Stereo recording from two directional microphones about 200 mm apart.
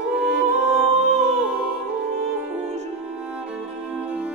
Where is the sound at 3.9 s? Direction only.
5° right (ahead or behind).